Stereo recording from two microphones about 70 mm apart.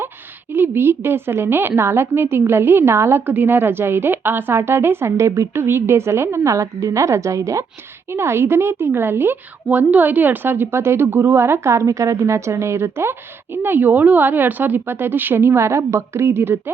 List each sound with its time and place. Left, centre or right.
0.5 s a woman's voice: right